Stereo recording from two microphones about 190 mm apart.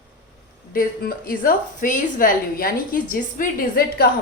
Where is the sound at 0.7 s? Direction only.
50° left (ahead or behind).